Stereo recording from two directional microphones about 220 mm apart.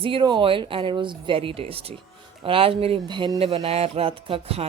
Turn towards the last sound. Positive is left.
turn(degrees=-25)  # may be behind; listen again after turning